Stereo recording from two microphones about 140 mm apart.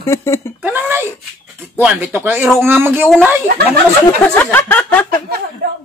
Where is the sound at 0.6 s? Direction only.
15° right (ahead or behind).